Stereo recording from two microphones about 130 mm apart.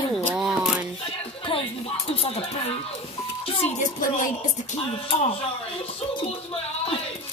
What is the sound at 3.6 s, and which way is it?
Speech, 65° left (ahead or behind).